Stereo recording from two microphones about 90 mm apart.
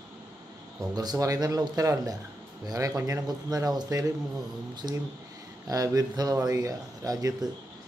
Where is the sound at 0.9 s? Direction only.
45° right (ahead or behind).